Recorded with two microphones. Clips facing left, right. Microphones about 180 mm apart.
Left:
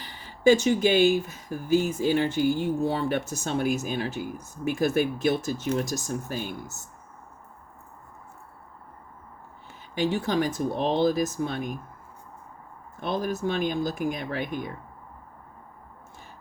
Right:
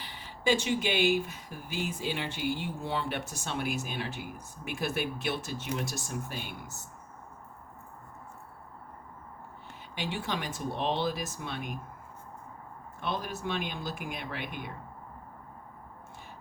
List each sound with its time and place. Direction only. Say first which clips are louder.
0.0 s speech: left 11 dB; 45° left (ahead or behind)
9.9 s speech: left 9 dB; 40° left (ahead or behind)
13.0 s speech: left 7 dB; 40° left (ahead or behind)